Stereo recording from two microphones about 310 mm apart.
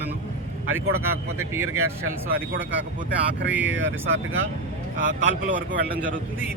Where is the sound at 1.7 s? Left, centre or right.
Right.